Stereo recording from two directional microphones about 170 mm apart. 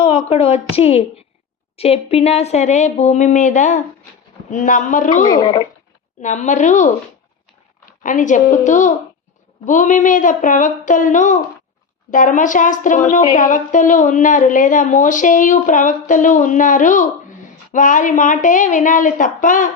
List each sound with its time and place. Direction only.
0.2 s a woman's voice: 40° left (ahead or behind)
5.2 s speech: 25° left (ahead or behind)
6.2 s a woman's voice: 45° left (ahead or behind)